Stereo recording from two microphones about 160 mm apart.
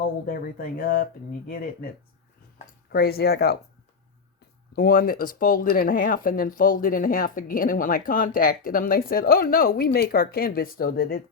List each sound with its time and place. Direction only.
0.3 s speech: 65° left (ahead or behind)
2.9 s speech: 75° left (ahead or behind)
4.7 s speech: 65° left (ahead or behind)